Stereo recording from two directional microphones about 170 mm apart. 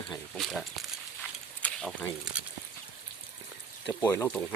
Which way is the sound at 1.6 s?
5° left (ahead or behind).